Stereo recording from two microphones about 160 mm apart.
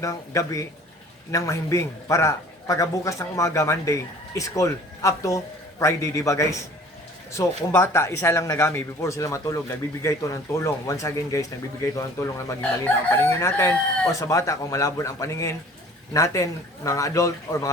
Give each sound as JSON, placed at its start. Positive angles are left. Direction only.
{"t": 0.0, "sound": "speech", "side_deg": 20}